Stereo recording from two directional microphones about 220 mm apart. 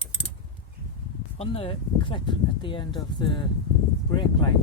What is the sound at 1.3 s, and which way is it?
Speech, 25° left (ahead or behind).